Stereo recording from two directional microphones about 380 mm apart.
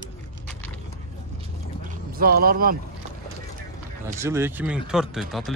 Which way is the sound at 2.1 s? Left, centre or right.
Right.